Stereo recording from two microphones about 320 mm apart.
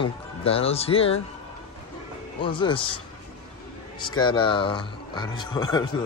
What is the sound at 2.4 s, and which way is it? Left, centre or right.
Speech, centre.